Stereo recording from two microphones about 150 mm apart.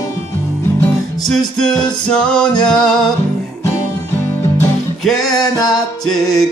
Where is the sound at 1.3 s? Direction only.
5° left (ahead or behind).